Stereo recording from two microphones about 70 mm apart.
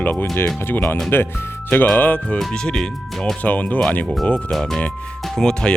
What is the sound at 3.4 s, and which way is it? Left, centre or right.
Speech, left.